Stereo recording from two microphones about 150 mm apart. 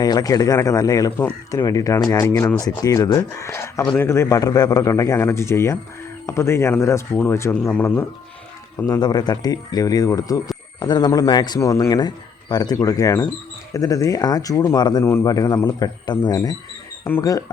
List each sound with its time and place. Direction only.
0.0 s speech: 25° left (ahead or behind)
8.9 s speech: 30° left (ahead or behind)